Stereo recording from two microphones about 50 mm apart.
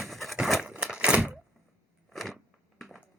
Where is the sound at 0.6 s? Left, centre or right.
Centre.